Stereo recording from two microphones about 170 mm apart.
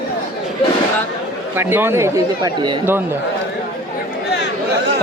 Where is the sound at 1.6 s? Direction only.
15° right (ahead or behind).